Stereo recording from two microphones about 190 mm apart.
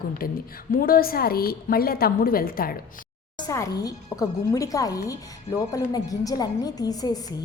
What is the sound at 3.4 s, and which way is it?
Speech, 15° left (ahead or behind).